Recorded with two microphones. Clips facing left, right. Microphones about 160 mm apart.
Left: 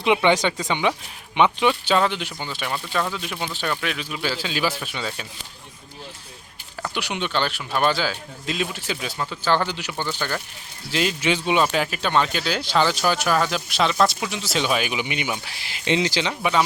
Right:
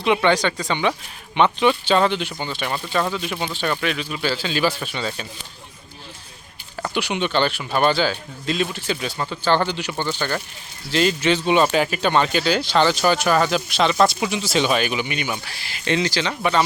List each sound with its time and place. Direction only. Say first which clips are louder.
0.0 s speech: even; 15° left (ahead or behind)
6.8 s speech: right 4 dB; centre (ahead or behind); by 16.3 s 20° left (ahead or behind)
16.4 s speech: right 2 dB; 5° left (ahead or behind)